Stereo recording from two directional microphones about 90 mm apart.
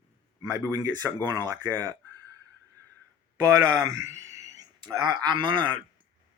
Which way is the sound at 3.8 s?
35° right (ahead or behind).